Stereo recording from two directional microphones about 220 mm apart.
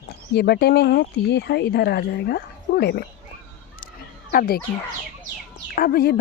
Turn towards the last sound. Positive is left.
turn(degrees=45)  # may be behind; listen again after turning